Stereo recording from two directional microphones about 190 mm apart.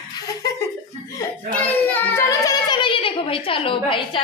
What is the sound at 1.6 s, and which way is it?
A child's voice, 10° left (ahead or behind).